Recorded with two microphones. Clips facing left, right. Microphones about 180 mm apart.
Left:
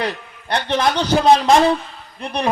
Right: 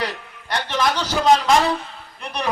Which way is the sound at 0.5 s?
30° left (ahead or behind).